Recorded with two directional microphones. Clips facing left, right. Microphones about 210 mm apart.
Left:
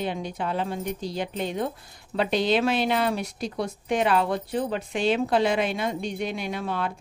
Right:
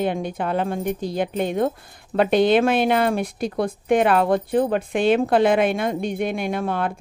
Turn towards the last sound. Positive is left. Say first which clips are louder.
# right 5 dB
turn(degrees=-55)  # may be behind; listen again after turning